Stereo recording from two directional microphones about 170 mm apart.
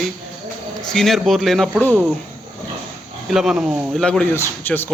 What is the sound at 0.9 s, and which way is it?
Speech, centre (ahead or behind).